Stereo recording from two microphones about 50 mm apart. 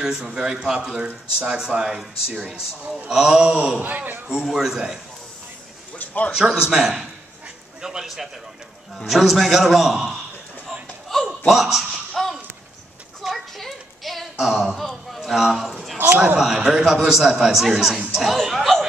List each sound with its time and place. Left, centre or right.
0.0 s a man's voice: centre
3.8 s a man's voice: right
4.3 s a man's voice: centre
5.9 s a man's voice: left
6.3 s a man's voice: centre
11.2 s a sound: centre
13.2 s a sound: centre
14.3 s speech: centre
14.7 s a man's voice: centre